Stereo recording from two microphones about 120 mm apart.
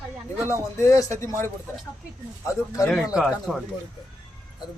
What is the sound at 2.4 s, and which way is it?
Speech, 25° left (ahead or behind).